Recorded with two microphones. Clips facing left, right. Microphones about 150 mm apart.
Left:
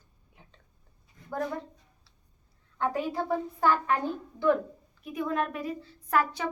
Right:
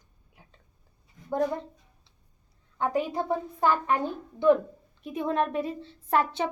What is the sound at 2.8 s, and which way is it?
A woman's voice, 15° right (ahead or behind).